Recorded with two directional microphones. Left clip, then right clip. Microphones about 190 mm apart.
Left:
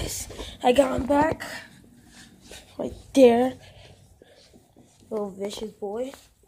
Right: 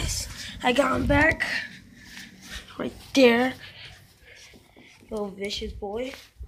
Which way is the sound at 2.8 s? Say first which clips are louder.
Left 2 dB; 20° left (ahead or behind).